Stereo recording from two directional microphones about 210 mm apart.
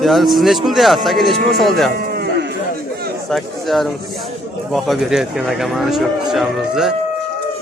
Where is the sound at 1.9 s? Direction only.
45° right (ahead or behind).